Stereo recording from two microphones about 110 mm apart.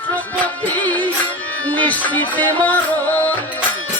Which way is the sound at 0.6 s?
15° left (ahead or behind).